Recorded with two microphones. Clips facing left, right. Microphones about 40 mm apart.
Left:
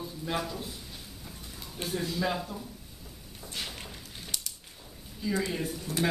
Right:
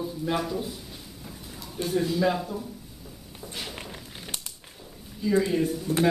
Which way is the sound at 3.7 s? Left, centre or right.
Right.